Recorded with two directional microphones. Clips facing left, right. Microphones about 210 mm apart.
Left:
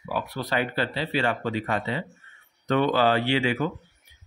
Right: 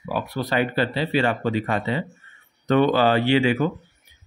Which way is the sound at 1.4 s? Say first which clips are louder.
Right 4 dB; 30° right (ahead or behind).